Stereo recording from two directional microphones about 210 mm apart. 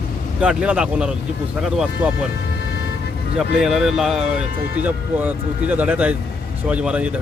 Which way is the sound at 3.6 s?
Centre (ahead or behind).